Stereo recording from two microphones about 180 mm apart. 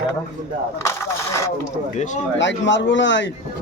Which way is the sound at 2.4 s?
90° left.